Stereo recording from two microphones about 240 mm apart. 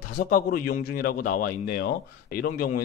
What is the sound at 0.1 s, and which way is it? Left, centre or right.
Speech, left.